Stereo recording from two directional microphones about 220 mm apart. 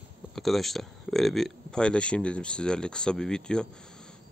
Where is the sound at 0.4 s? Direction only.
Centre (ahead or behind).